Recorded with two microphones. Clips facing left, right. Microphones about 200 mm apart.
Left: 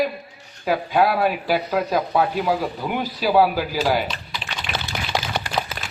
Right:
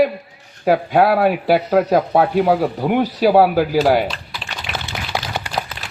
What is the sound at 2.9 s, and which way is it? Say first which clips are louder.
A man's voice: right 7 dB; 70° right (ahead or behind).